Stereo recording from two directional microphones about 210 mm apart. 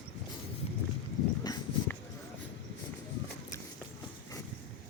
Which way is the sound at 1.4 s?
15° left (ahead or behind).